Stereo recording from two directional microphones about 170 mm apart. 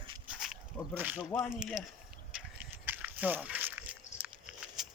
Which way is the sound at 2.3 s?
10° right (ahead or behind).